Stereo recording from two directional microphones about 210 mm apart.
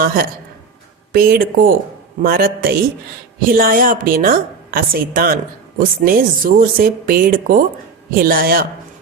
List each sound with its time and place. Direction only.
0.0 s a woman's voice: 45° right (ahead or behind)